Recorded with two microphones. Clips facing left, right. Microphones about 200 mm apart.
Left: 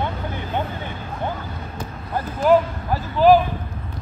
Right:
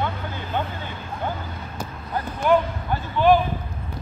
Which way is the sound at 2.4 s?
35° left (ahead or behind).